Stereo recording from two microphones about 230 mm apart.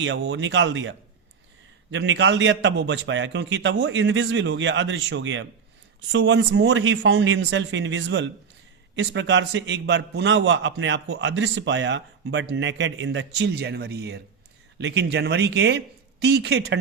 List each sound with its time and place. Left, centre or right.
0.0 s a man's voice: right